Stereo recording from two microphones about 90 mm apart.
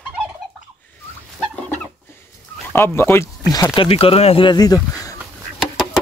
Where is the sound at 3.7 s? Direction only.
85° left.